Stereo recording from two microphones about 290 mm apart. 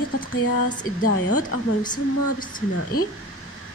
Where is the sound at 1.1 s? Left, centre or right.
Left.